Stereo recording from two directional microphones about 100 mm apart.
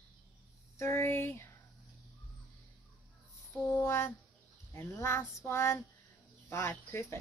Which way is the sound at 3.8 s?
25° left (ahead or behind).